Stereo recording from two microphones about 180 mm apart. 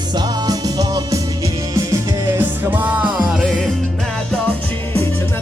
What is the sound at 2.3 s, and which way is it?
Music, 10° right (ahead or behind).